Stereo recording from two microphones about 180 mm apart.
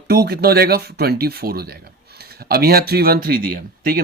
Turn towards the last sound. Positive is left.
turn(degrees=-55)  # may be behind; listen again after turning